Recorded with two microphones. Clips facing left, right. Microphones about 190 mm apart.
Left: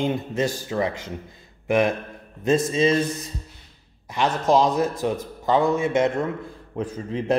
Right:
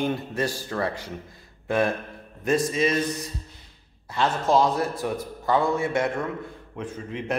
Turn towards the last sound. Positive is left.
turn(degrees=35)  # may be behind; listen again after turning